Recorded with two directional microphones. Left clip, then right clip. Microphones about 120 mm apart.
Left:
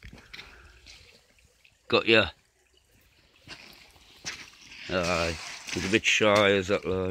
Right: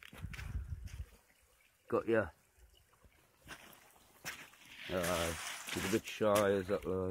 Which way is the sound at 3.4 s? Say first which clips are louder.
Left 7 dB; centre (ahead or behind).